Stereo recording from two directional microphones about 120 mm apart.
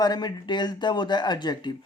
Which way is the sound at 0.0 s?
35° left (ahead or behind).